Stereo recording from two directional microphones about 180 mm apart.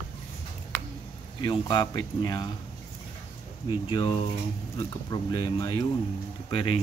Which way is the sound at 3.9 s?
30° left (ahead or behind).